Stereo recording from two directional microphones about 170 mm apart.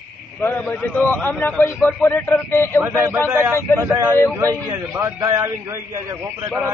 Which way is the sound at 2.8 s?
15° right (ahead or behind).